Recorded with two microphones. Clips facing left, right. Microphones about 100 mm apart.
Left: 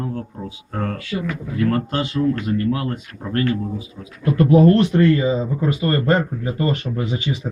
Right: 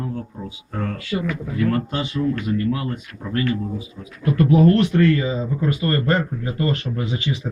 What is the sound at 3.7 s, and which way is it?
Speech, 20° left (ahead or behind).